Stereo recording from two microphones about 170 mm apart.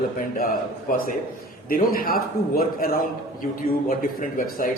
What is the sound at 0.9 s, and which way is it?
A man's voice, 55° left (ahead or behind).